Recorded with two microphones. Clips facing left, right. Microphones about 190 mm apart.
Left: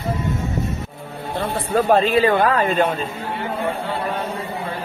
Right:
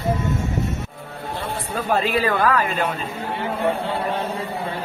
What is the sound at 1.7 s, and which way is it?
Speech, 50° left (ahead or behind).